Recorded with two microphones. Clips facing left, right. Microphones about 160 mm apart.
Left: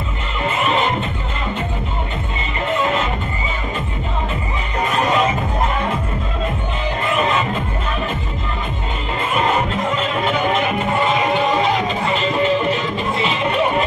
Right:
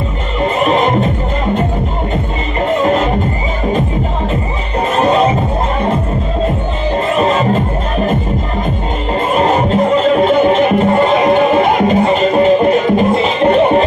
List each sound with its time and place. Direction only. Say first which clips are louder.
0.6 s music: right 7 dB; 40° right (ahead or behind)
2.8 s music: right 7 dB; 40° right (ahead or behind)
4.9 s music: right 6 dB; 35° right (ahead or behind)
7.1 s music: right 6 dB; 35° right (ahead or behind)
9.3 s music: right 6 dB; 40° right (ahead or behind)